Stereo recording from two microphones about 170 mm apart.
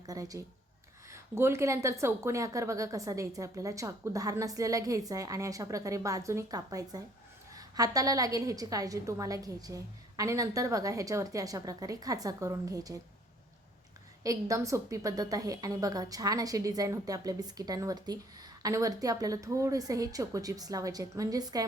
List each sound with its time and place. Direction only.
0.0 s a woman's voice: 20° right (ahead or behind)
14.3 s a woman's voice: 20° right (ahead or behind)